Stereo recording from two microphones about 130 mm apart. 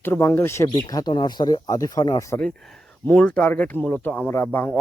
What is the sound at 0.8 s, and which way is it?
Speech, 30° left (ahead or behind).